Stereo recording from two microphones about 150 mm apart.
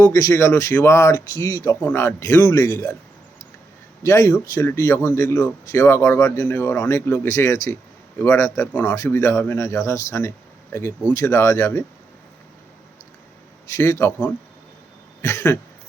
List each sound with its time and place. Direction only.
0.0 s speech: 20° left (ahead or behind)
4.0 s speech: 20° left (ahead or behind)
13.7 s speech: 20° left (ahead or behind)
15.2 s throat clearing: 15° left (ahead or behind)